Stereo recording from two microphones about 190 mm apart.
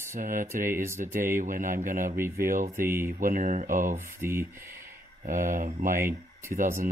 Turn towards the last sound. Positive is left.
turn(degrees=-45)  # may be behind; listen again after turning